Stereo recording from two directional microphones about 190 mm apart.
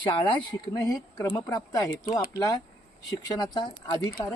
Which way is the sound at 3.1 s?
20° left (ahead or behind).